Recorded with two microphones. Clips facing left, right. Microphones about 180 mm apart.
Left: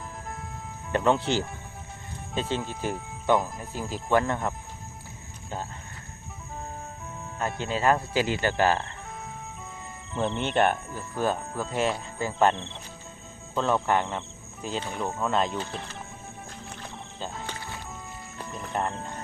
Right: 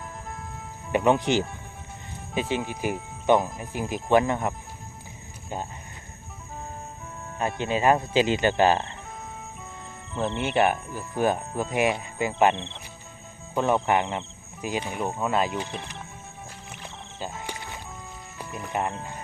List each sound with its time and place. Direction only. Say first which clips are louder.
0.9 s speech: right 2 dB; 15° right (ahead or behind)
7.3 s speech: right 3 dB; 15° right (ahead or behind)
10.2 s speech: right 1 dB; 5° right (ahead or behind)
16.7 s music: right 1 dB; 10° right (ahead or behind)
18.3 s speech: right 1 dB; 10° right (ahead or behind)